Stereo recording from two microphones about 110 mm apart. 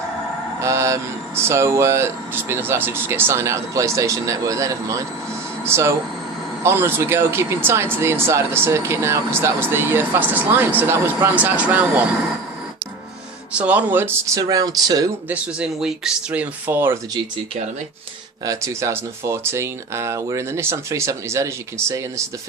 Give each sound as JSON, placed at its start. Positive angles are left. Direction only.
{"t": 0.6, "sound": "speech", "side_deg": -25}
{"t": 13.5, "sound": "speech", "side_deg": -10}
{"t": 15.3, "sound": "speech", "side_deg": -10}
{"t": 18.4, "sound": "speech", "side_deg": -30}